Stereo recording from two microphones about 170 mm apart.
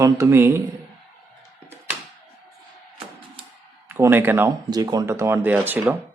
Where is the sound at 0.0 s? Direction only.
15° right (ahead or behind).